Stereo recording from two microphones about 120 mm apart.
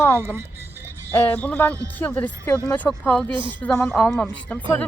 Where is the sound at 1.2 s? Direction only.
15° left (ahead or behind).